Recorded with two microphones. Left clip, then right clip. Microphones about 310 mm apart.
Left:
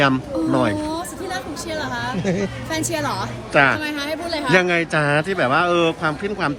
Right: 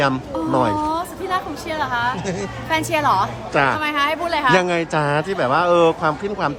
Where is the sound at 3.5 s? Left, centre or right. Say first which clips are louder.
Left 2 dB; centre.